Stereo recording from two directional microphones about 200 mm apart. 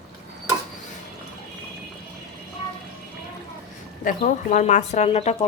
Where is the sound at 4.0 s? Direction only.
40° left (ahead or behind).